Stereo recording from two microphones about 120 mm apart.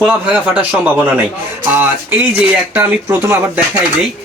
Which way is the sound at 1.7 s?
15° right (ahead or behind).